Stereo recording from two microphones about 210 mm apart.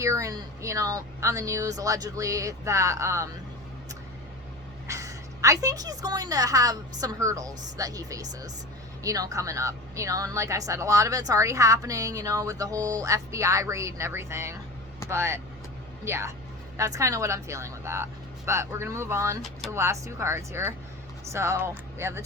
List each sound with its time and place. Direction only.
0.0 s speech: 15° right (ahead or behind)
4.9 s speech: 15° right (ahead or behind)